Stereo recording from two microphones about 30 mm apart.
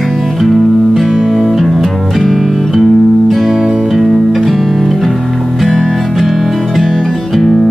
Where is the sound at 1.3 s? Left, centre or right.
Centre.